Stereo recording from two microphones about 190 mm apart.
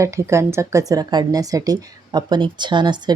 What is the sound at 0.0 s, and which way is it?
Speech, 15° right (ahead or behind).